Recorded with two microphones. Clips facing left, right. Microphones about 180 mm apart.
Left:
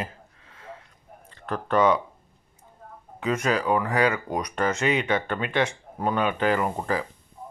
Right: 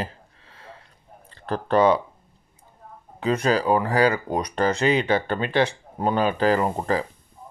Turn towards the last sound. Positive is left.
turn(degrees=-35)  # may be behind; listen again after turning